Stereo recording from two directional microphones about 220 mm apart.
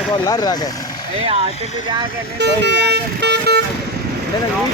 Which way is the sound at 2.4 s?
50° right (ahead or behind).